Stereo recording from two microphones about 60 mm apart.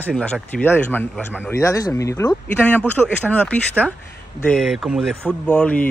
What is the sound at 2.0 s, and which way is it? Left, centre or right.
Speech, left.